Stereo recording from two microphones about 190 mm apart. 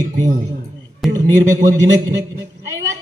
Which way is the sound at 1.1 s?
20° right (ahead or behind).